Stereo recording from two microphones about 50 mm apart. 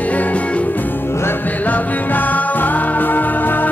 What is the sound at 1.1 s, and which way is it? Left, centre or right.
Music, left.